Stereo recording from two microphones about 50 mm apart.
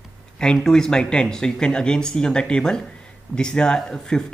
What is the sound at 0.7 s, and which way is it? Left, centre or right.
Speech, centre.